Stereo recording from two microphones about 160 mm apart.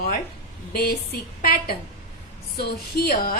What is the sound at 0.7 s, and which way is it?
A woman's voice, 75° left (ahead or behind).